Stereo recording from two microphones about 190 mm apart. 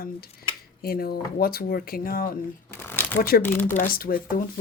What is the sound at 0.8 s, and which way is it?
Speech, 50° left (ahead or behind).